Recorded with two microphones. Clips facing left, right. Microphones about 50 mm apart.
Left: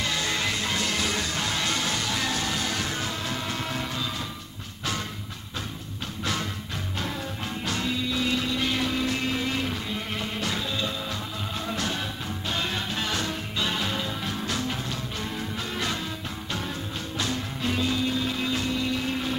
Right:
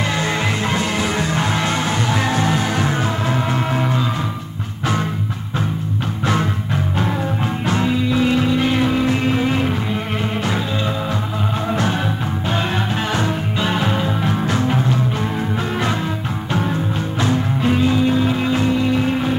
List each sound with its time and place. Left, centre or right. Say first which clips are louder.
0.1 s music: right 8 dB; right
7.6 s music: right 9 dB; right
13.1 s music: right 9 dB; right
16.5 s music: right 13 dB; right